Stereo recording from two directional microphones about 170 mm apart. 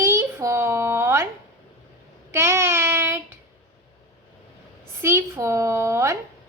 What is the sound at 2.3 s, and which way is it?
Child singing, 15° right (ahead or behind).